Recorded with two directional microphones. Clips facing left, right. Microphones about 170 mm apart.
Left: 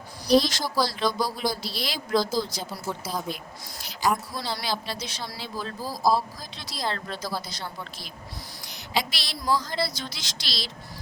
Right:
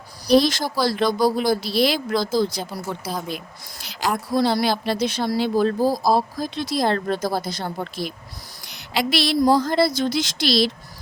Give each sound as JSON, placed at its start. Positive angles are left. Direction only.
{"t": 0.3, "sound": "a woman's voice", "side_deg": -55}
{"t": 3.0, "sound": "speech", "side_deg": -70}
{"t": 4.3, "sound": "a woman's voice", "side_deg": -55}
{"t": 8.9, "sound": "a woman's voice", "side_deg": -65}